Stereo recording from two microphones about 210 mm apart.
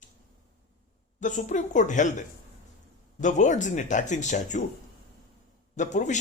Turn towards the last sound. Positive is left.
turn(degrees=35)  # may be behind; listen again after turning